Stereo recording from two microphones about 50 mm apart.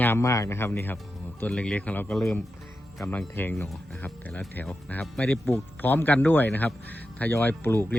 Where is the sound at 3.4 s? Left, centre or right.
Left.